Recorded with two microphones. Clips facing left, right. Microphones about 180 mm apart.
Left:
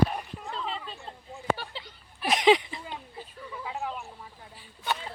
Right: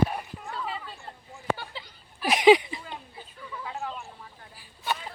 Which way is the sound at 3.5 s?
15° left (ahead or behind).